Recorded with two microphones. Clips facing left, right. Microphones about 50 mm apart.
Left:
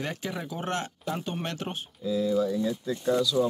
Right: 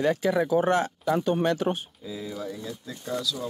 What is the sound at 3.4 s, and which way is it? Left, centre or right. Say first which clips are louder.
Speech: left 9 dB; left.